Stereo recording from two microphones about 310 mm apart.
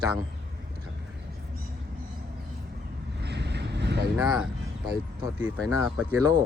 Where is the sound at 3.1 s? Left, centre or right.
Right.